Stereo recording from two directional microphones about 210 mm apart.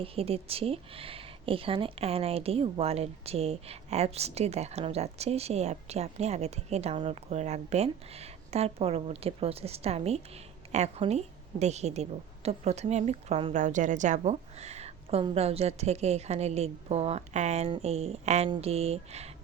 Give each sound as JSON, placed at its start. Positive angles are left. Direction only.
{"t": 0.0, "sound": "a woman's voice", "side_deg": -30}